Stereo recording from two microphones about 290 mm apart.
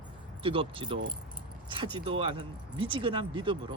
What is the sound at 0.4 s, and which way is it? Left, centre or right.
Speech, centre.